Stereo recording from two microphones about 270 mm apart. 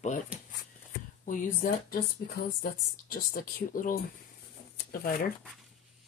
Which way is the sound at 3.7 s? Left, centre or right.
Left.